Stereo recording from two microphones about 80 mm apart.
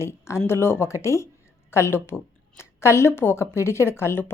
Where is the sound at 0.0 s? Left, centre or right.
Left.